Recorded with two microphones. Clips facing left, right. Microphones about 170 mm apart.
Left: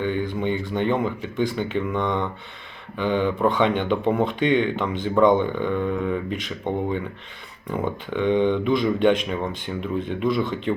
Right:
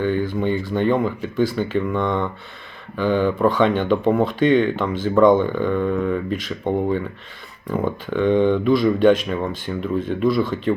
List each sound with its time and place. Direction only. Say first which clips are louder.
0.0 s speech: right 4 dB; 20° left (ahead or behind)
8.1 s speech: right 3 dB; 20° left (ahead or behind)